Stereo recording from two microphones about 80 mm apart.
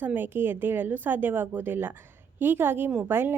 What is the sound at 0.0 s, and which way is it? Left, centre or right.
A woman's voice, right.